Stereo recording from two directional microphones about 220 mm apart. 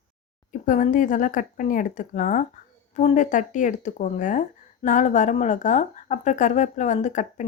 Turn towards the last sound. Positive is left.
turn(degrees=35)  # may be behind; listen again after turning